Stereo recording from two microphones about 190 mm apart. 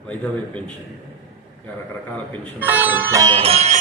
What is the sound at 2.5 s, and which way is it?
Speech, 10° right (ahead or behind).